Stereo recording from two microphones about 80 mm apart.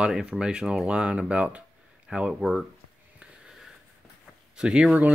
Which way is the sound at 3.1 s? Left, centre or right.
Centre.